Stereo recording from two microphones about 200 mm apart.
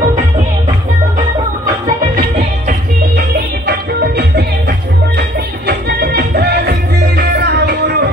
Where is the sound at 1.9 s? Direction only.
45° right (ahead or behind).